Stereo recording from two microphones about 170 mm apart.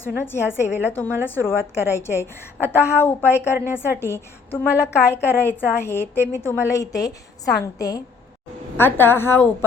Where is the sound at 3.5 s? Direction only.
10° right (ahead or behind).